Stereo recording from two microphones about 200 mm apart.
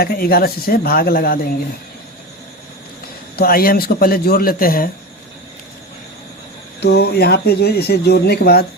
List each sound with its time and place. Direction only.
0.0 s speech: 50° left (ahead or behind)
3.3 s speech: 45° left (ahead or behind)
6.7 s speech: 55° left (ahead or behind)